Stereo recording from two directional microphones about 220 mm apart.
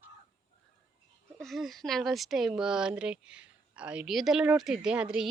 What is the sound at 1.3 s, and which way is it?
Speech, centre (ahead or behind).